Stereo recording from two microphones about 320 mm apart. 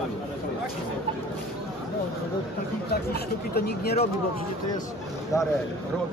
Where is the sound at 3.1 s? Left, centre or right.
Left.